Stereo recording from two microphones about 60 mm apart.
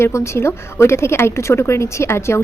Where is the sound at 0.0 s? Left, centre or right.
Left.